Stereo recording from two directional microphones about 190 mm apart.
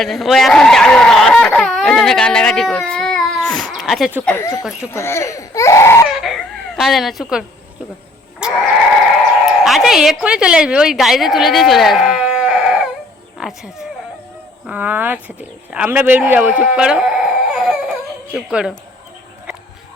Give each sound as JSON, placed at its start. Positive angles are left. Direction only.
{"t": 0.0, "sound": "speech", "side_deg": 0}
{"t": 4.4, "sound": "speech", "side_deg": 15}
{"t": 6.1, "sound": "chicken", "side_deg": 0}
{"t": 8.4, "sound": "sheep", "side_deg": -5}
{"t": 9.5, "sound": "a woman's voice", "side_deg": 0}
{"t": 13.4, "sound": "a sound", "side_deg": -5}
{"t": 14.7, "sound": "speech", "side_deg": -10}